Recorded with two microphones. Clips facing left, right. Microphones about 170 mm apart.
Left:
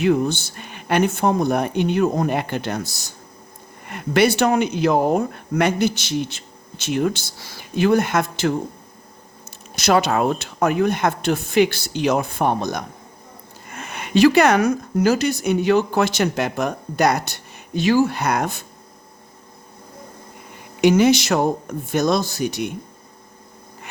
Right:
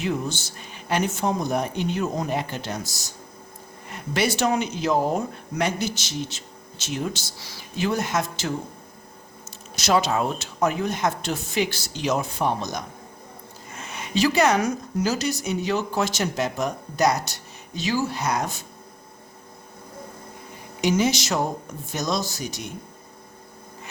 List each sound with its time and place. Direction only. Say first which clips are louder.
0.0 s speech: left 8 dB; 60° left (ahead or behind)
9.7 s speech: left 4 dB; 60° left (ahead or behind)
20.8 s speech: left 7 dB; 60° left (ahead or behind)